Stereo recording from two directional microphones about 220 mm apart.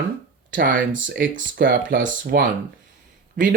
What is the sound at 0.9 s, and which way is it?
Speech, 55° right (ahead or behind).